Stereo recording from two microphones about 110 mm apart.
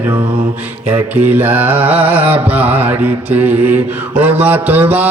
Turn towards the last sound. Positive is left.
turn(degrees=-15)  # may be behind; listen again after turning